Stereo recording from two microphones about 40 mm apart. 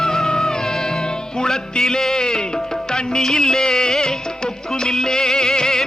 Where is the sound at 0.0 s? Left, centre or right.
Centre.